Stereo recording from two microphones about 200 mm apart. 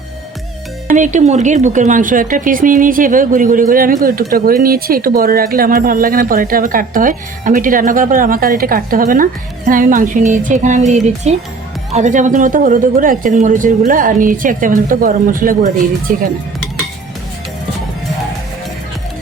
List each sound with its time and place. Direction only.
0.9 s speech: 40° right (ahead or behind)